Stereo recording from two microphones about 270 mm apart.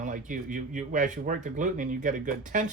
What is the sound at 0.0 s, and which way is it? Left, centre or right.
Speech, right.